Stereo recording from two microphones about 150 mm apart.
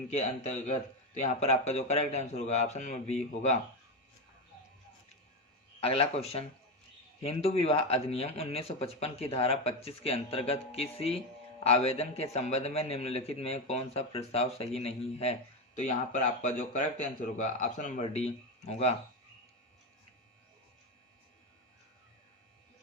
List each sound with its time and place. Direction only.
0.1 s a man's voice: 50° left (ahead or behind)
5.8 s a man's voice: 40° left (ahead or behind); by 18.0 s 55° left (ahead or behind)
18.0 s a man's voice: 45° left (ahead or behind)